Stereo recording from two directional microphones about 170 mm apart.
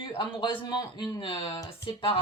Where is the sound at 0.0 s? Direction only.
30° left (ahead or behind).